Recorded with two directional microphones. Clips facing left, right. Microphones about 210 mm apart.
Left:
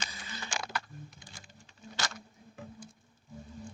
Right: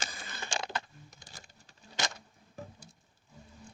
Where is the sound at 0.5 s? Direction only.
25° right (ahead or behind).